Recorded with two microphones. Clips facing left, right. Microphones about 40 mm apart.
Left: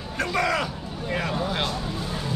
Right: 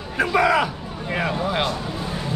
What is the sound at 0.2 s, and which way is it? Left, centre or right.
Speech, centre.